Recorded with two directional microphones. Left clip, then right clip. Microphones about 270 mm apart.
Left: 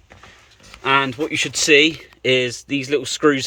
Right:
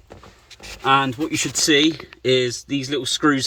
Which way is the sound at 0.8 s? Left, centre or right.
Centre.